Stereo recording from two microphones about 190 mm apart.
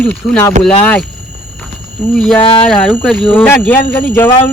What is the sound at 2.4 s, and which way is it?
Speech, 30° left (ahead or behind).